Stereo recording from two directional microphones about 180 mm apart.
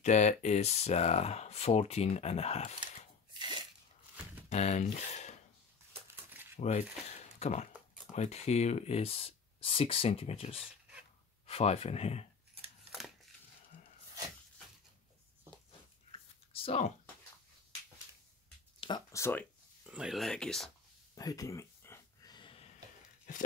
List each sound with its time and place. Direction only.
0.0 s speech: 40° left (ahead or behind)
3.3 s sneeze: 25° right (ahead or behind)
4.5 s speech: 40° left (ahead or behind)
6.5 s speech: 40° left (ahead or behind)
12.9 s a sound: centre (ahead or behind)
16.1 s a sound: 30° left (ahead or behind)
18.8 s speech: 25° left (ahead or behind)
19.9 s speech: 5° right (ahead or behind)
21.1 s a sound: 20° left (ahead or behind)